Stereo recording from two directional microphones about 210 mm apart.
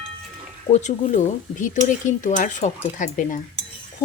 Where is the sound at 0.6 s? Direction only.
30° left (ahead or behind).